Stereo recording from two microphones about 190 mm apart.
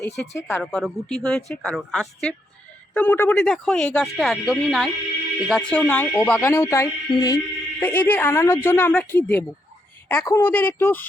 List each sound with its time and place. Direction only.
0.0 s speech: 65° left (ahead or behind)
0.4 s speech: 5° left (ahead or behind)